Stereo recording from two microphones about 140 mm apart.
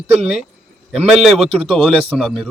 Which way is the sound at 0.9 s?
Centre (ahead or behind).